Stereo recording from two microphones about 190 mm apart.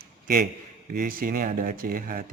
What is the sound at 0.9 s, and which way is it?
Speech, 45° right (ahead or behind).